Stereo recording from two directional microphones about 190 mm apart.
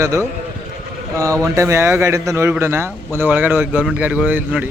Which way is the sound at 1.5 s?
15° right (ahead or behind).